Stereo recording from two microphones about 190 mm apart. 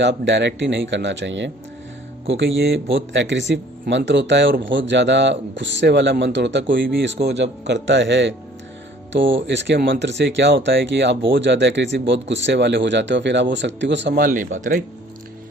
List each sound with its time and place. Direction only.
0.0 s speech: 70° right (ahead or behind)
14.2 s speech: 45° right (ahead or behind)